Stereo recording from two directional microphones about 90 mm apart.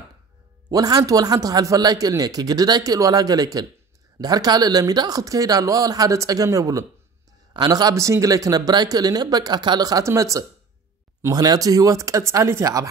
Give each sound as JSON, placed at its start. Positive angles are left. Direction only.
{"t": 0.7, "sound": "speech", "side_deg": -45}
{"t": 7.9, "sound": "speech", "side_deg": -35}